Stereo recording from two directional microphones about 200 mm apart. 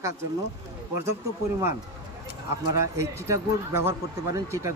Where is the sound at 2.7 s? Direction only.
15° right (ahead or behind).